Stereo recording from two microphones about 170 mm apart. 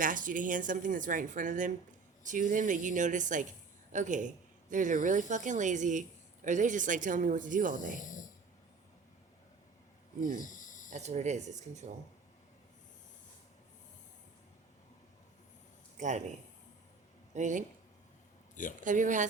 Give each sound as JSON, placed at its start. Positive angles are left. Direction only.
{"t": 0.0, "sound": "a woman's voice", "side_deg": -50}
{"t": 7.9, "sound": "speech", "side_deg": 50}
{"t": 10.4, "sound": "snake", "side_deg": 50}
{"t": 10.8, "sound": "a woman's voice", "side_deg": -40}
{"t": 16.0, "sound": "a man's voice", "side_deg": -45}
{"t": 17.3, "sound": "a woman's voice", "side_deg": -45}
{"t": 18.8, "sound": "a woman's voice", "side_deg": -50}